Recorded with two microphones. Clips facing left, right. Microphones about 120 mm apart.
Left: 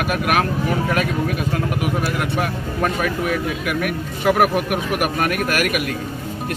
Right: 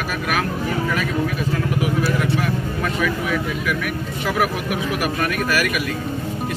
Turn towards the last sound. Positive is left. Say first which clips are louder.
# left 1 dB
turn(degrees=55)  # may be behind; listen again after turning